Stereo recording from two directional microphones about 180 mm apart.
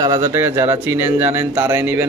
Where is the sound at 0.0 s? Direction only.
25° right (ahead or behind).